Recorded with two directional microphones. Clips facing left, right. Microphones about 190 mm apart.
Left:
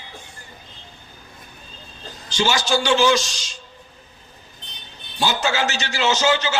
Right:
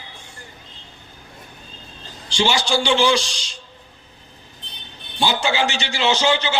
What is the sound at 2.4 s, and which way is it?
Speech, 30° right (ahead or behind).